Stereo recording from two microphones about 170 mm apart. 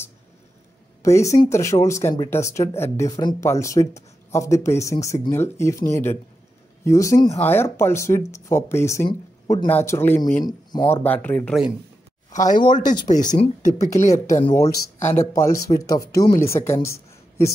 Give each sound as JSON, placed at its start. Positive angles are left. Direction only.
{"t": 1.0, "sound": "speech", "side_deg": 15}
{"t": 12.3, "sound": "speech", "side_deg": 45}
{"t": 14.7, "sound": "speech", "side_deg": 15}